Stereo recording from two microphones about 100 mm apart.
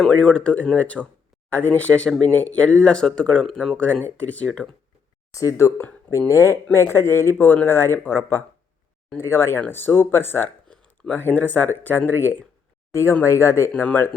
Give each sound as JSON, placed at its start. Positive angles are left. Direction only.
{"t": 0.0, "sound": "speech", "side_deg": 5}
{"t": 5.3, "sound": "speech", "side_deg": 30}
{"t": 12.9, "sound": "speech", "side_deg": 30}